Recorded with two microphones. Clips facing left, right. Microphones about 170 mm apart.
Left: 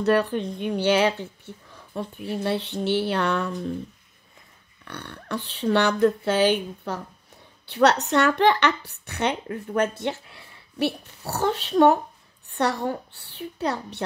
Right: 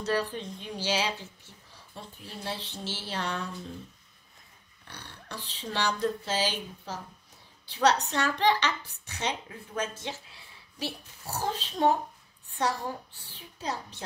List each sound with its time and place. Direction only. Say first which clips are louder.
0.0 s speech: left 9 dB; 65° left (ahead or behind)
4.8 s a woman's voice: left 10 dB; 60° left (ahead or behind)